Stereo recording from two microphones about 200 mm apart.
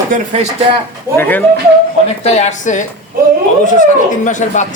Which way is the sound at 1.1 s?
10° left (ahead or behind).